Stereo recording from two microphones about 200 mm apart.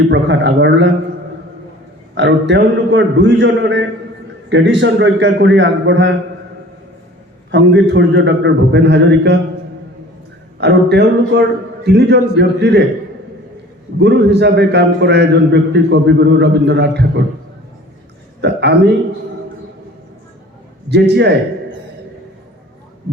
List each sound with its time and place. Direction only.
0.1 s a man's voice: 65° right (ahead or behind)
2.1 s a man's voice: 65° right (ahead or behind)
7.5 s a man's voice: 65° right (ahead or behind)
10.6 s a man's voice: 55° right (ahead or behind)
14.0 s a man's voice: 55° right (ahead or behind)
18.4 s a man's voice: 55° right (ahead or behind)
20.9 s a man's voice: 55° right (ahead or behind)